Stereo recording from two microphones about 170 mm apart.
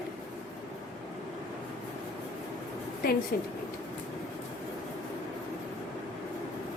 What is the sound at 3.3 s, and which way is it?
Speech, 65° left (ahead or behind).